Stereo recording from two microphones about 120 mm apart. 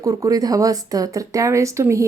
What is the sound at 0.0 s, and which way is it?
Speech, 30° right (ahead or behind).